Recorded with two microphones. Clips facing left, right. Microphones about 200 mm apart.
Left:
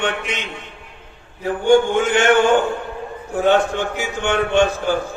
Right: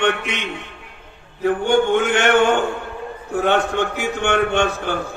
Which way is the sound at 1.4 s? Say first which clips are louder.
Left 2 dB; 60° right (ahead or behind).